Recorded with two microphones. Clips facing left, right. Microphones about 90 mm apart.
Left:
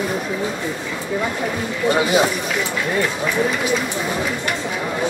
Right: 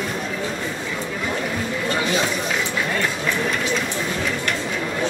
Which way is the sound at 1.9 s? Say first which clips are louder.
Left 6 dB; 15° left (ahead or behind).